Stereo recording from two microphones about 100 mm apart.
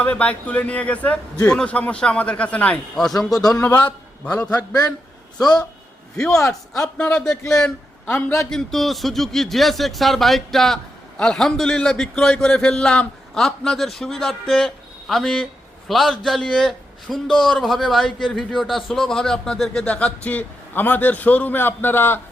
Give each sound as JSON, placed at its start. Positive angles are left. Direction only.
{"t": 0.0, "sound": "a man's voice", "side_deg": 15}
{"t": 3.6, "sound": "a man's voice", "side_deg": 15}
{"t": 6.1, "sound": "a man's voice", "side_deg": 5}
{"t": 8.1, "sound": "a man's voice", "side_deg": 25}
{"t": 8.4, "sound": "a man's voice", "side_deg": 5}